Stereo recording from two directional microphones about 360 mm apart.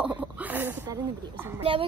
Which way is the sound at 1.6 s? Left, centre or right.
Centre.